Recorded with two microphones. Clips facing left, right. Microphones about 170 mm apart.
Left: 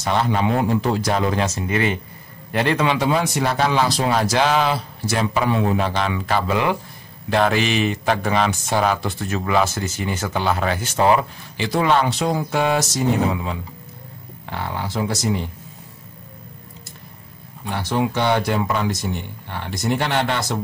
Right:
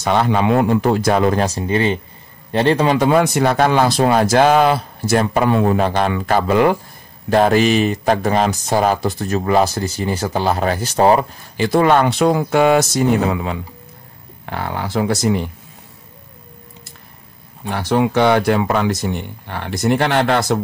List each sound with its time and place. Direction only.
0.0 s speech: 60° right (ahead or behind)
1.4 s speech: 35° right (ahead or behind)
3.0 s speech: 55° right (ahead or behind)
17.6 s speech: 60° right (ahead or behind)